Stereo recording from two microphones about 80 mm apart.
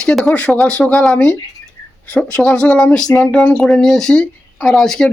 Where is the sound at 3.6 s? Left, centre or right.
Centre.